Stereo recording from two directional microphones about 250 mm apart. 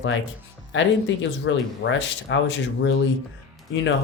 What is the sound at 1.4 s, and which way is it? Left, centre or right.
Speech, left.